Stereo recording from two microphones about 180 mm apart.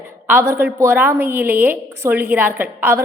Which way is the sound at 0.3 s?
15° right (ahead or behind).